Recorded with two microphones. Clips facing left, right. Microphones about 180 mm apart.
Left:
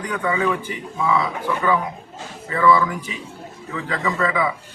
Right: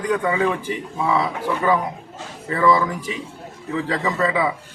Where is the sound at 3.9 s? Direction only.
30° right (ahead or behind).